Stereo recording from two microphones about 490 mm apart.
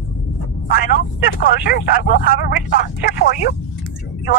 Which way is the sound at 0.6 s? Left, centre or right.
Centre.